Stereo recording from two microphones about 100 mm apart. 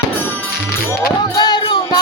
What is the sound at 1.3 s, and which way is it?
Music, 45° left (ahead or behind).